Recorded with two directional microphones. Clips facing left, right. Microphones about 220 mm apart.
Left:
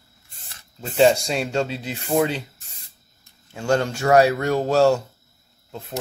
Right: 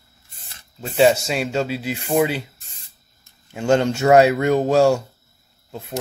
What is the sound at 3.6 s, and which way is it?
Speech, 20° right (ahead or behind).